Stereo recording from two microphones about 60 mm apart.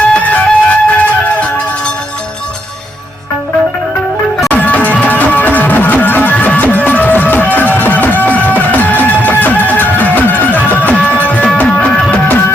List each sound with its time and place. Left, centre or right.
0.1 s music: left
4.4 s music: left